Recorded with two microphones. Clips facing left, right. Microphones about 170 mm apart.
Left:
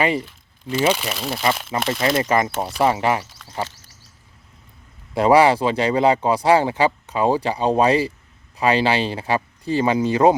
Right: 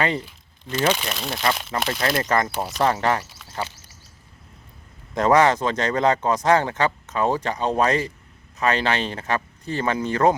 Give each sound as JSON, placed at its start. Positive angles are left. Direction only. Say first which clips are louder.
{"t": 0.6, "sound": "speech", "louder": "left 3 dB", "side_deg": 5}
{"t": 5.1, "sound": "speech", "louder": "left 3 dB", "side_deg": 10}